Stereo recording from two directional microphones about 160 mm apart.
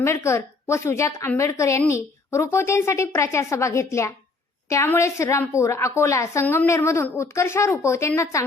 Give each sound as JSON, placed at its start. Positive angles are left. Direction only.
{"t": 0.0, "sound": "a woman's voice", "side_deg": 15}